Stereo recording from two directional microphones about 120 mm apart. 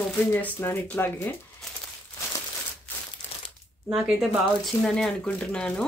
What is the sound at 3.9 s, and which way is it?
Speech, 5° right (ahead or behind).